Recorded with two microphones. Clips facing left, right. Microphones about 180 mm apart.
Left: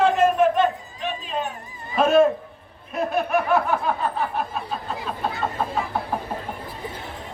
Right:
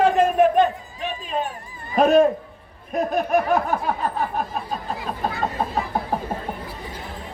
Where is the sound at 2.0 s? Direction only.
40° right (ahead or behind).